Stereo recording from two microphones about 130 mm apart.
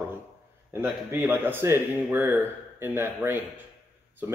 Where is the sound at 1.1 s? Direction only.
15° right (ahead or behind).